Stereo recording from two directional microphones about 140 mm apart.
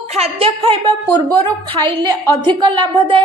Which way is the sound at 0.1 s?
45° right (ahead or behind).